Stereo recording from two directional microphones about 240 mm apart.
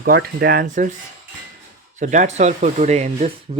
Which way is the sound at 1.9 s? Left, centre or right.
Right.